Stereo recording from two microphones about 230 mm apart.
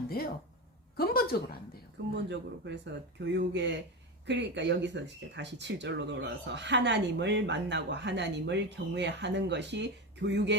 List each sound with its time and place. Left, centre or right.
0.2 s a woman's voice: left
2.3 s speech: right